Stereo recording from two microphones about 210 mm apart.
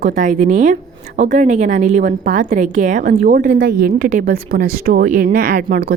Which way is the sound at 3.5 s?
50° right (ahead or behind).